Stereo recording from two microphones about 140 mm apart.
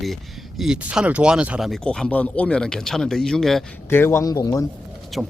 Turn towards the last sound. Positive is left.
turn(degrees=0)  # may be behind; listen again after turning